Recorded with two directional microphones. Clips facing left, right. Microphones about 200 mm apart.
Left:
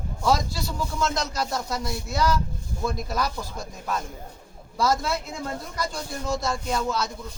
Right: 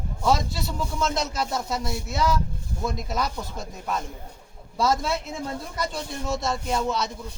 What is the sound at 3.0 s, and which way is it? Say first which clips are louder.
Speech: even; centre (ahead or behind).